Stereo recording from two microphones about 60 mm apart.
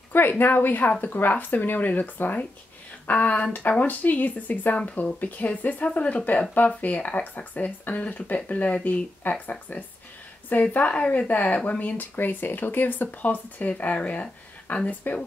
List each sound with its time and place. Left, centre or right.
0.1 s speech: left